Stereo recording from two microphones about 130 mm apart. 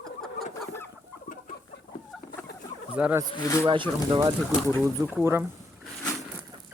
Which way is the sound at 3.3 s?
25° left (ahead or behind).